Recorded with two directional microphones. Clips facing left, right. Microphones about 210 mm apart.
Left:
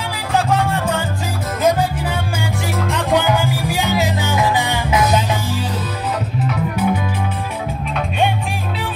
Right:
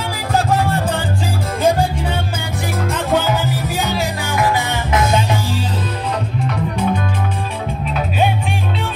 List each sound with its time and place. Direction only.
1.6 s music: 30° right (ahead or behind)
2.9 s music: 15° left (ahead or behind)
6.4 s music: 5° left (ahead or behind)